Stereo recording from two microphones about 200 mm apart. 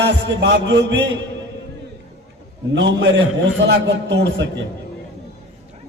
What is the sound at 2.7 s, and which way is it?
A man's voice, 65° right (ahead or behind).